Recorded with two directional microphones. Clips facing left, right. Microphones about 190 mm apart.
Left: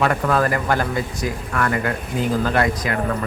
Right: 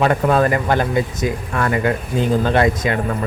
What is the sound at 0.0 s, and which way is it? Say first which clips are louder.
Speech: right 3 dB; 25° right (ahead or behind).